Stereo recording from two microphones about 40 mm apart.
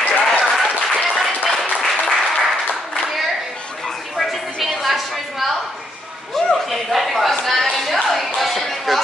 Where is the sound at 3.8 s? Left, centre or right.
Centre.